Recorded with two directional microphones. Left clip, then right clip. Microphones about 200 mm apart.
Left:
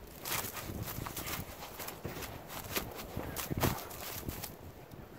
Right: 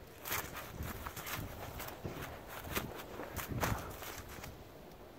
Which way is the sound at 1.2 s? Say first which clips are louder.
Left 1 dB; 10° left (ahead or behind).